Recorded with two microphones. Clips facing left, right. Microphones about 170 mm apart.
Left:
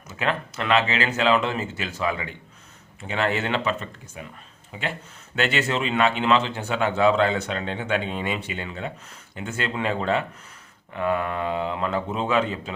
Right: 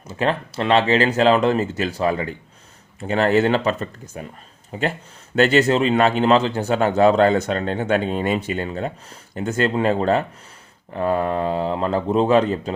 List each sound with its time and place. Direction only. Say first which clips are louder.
0.1 s speech: right 5 dB; 35° right (ahead or behind)